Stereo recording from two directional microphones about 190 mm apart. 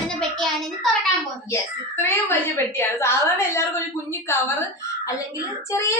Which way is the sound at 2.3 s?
10° left (ahead or behind).